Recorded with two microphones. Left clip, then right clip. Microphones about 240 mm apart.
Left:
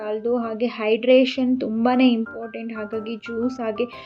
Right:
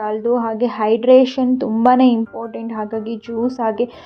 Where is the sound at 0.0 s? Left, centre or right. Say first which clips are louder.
Right 6 dB; centre.